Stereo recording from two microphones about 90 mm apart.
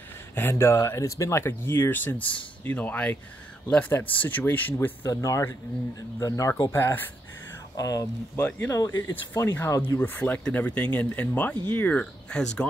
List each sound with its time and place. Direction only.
0.3 s speech: 25° left (ahead or behind)
5.0 s speech: 35° left (ahead or behind)
6.7 s speech: 25° left (ahead or behind)
7.7 s speech: 40° left (ahead or behind)
9.1 s speech: 25° left (ahead or behind)